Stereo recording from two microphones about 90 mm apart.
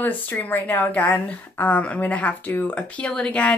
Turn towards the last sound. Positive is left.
turn(degrees=15)  # may be behind; listen again after turning